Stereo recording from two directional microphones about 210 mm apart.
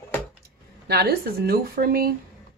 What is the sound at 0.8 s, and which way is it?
Speech, 50° right (ahead or behind).